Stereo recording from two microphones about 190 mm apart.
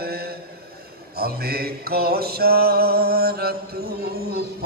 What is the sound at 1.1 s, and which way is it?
Mantra, 55° right (ahead or behind).